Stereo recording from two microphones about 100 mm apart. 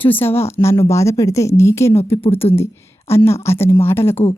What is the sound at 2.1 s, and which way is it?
Speech, 65° left (ahead or behind).